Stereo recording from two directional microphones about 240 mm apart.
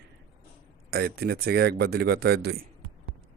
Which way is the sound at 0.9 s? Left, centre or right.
Right.